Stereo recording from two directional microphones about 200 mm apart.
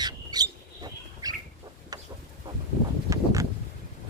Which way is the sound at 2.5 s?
25° right (ahead or behind).